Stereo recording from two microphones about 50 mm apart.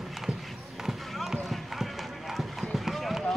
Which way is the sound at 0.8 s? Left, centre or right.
Centre.